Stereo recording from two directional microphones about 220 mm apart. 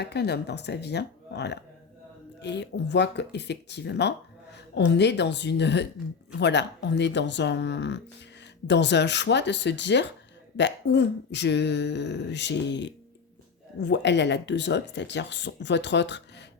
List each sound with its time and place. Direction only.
0.0 s speech: 50° left (ahead or behind)